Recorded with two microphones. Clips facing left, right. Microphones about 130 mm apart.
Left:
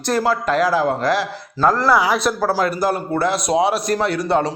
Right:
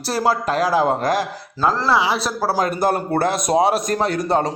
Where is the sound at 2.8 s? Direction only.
55° right (ahead or behind).